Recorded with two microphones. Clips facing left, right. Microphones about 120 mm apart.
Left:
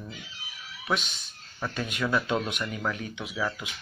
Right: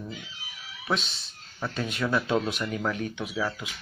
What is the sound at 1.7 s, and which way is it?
Speech, 35° right (ahead or behind).